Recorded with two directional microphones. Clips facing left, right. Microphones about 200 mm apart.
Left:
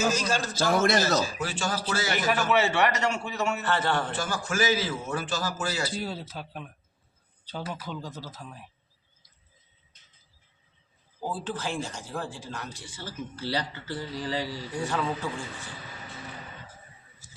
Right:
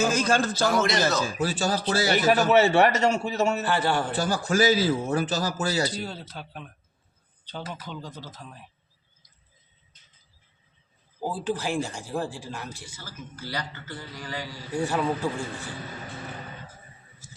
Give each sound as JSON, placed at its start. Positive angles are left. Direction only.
{"t": 0.0, "sound": "a man's voice", "side_deg": -55}
{"t": 0.6, "sound": "a man's voice", "side_deg": 50}
{"t": 1.4, "sound": "a man's voice", "side_deg": -35}
{"t": 3.7, "sound": "speech", "side_deg": -10}
{"t": 4.1, "sound": "a man's voice", "side_deg": -35}
{"t": 6.0, "sound": "speech", "side_deg": 5}
{"t": 11.2, "sound": "speech", "side_deg": -10}
{"t": 12.8, "sound": "a man's voice", "side_deg": 30}
{"t": 14.8, "sound": "speech", "side_deg": -10}